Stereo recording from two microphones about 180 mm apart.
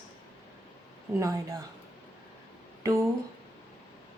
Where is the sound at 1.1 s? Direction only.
15° right (ahead or behind).